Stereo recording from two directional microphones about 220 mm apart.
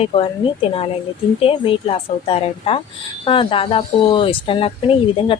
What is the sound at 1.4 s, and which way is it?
A woman's voice, 25° left (ahead or behind).